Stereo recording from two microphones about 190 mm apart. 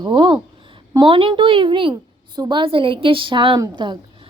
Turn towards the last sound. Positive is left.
turn(degrees=-25)  # may be behind; listen again after turning